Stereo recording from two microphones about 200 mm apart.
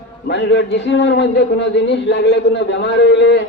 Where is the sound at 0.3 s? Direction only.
60° left (ahead or behind).